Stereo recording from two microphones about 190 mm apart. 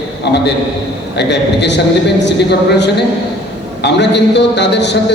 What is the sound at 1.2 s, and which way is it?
A woman's voice, 65° left (ahead or behind).